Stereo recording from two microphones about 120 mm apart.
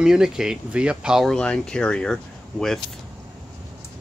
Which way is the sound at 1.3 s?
5° left (ahead or behind).